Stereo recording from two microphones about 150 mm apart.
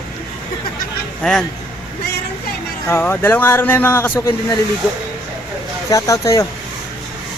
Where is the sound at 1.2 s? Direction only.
5° left (ahead or behind).